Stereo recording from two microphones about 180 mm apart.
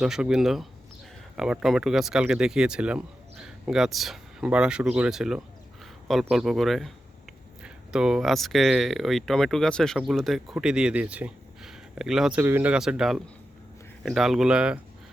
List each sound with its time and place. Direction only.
0.0 s speech: 5° right (ahead or behind)